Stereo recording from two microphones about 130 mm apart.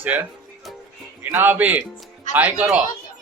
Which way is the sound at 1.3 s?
15° right (ahead or behind).